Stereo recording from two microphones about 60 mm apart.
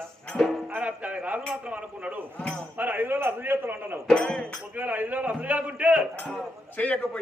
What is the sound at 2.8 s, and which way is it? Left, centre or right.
A man's voice, right.